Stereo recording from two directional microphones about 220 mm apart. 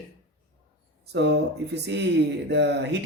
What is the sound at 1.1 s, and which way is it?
Speech, 50° right (ahead or behind).